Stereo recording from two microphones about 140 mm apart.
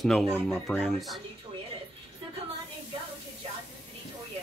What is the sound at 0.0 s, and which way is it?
Speech, centre (ahead or behind).